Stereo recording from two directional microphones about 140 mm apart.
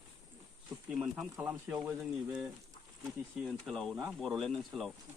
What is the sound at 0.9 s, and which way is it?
Speech, 5° right (ahead or behind).